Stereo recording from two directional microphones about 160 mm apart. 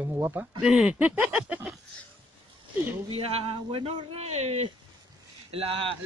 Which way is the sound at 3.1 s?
35° right (ahead or behind).